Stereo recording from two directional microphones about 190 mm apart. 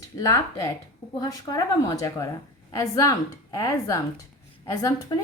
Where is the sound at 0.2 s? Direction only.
15° left (ahead or behind).